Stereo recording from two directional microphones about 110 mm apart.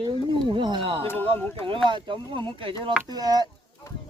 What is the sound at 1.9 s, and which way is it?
Speech, 50° right (ahead or behind).